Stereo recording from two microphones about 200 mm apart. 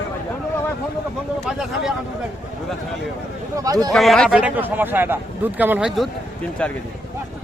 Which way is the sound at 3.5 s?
15° right (ahead or behind).